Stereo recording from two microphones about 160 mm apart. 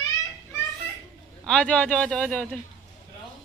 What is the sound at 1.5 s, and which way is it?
A man's voice, 5° left (ahead or behind).